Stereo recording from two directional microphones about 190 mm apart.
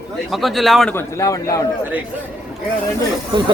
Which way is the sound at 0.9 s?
15° left (ahead or behind).